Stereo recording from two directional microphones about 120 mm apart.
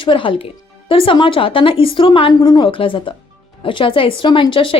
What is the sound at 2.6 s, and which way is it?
Speech, 45° left (ahead or behind).